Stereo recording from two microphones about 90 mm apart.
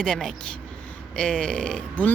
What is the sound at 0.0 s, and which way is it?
Speech, 5° left (ahead or behind).